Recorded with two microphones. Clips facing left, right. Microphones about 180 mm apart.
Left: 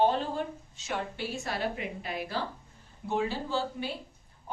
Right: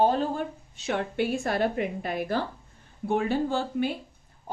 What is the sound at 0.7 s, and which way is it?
A woman's voice, 60° right (ahead or behind).